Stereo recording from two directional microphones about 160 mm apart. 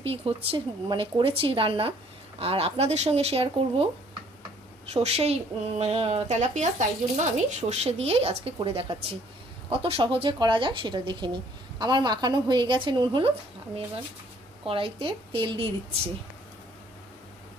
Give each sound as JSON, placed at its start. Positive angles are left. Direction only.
{"t": 0.0, "sound": "a woman's voice", "side_deg": -35}
{"t": 4.9, "sound": "a woman's voice", "side_deg": -40}
{"t": 14.7, "sound": "a woman's voice", "side_deg": -35}